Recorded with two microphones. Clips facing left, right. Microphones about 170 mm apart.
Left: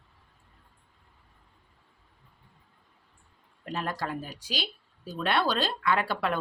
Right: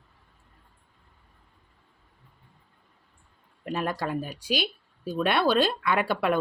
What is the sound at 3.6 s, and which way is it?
Speech, 15° right (ahead or behind).